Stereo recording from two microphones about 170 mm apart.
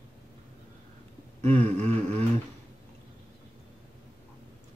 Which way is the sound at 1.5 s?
40° right (ahead or behind).